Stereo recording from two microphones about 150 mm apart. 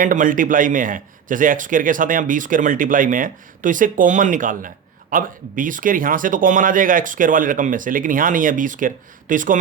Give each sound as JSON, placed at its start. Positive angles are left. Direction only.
{"t": 0.0, "sound": "a man's voice", "side_deg": -65}